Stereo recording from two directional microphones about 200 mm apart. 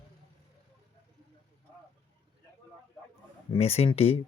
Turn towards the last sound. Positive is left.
turn(degrees=30)  # may be behind; listen again after turning